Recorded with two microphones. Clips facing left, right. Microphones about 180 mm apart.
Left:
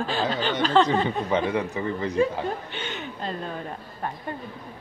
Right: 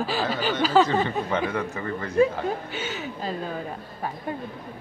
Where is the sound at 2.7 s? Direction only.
5° right (ahead or behind).